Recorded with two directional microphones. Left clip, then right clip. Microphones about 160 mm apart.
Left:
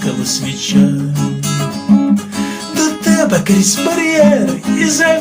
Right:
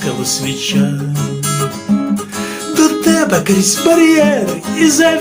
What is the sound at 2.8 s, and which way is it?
Music, 30° right (ahead or behind).